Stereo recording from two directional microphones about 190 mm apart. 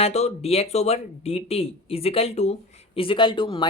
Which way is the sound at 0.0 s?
35° left (ahead or behind).